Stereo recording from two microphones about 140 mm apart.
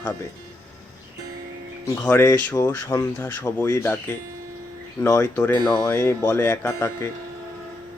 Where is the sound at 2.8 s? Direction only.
20° left (ahead or behind).